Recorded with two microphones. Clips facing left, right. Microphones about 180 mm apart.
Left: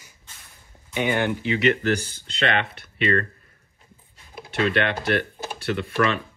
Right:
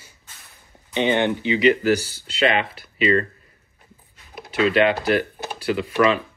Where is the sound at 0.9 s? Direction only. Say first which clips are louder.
Right 4 dB; 25° right (ahead or behind).